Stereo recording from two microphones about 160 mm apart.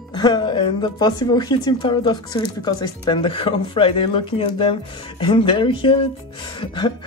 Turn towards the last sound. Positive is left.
turn(degrees=30)  # may be behind; listen again after turning